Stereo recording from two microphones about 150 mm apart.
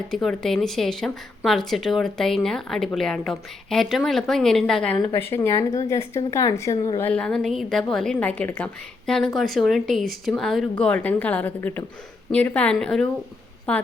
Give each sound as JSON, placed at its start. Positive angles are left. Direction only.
{"t": 0.1, "sound": "a woman's voice", "side_deg": 0}
{"t": 7.1, "sound": "a woman's voice", "side_deg": 5}